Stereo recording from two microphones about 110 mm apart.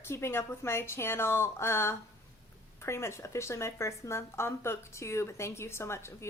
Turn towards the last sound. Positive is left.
turn(degrees=25)  # may be behind; listen again after turning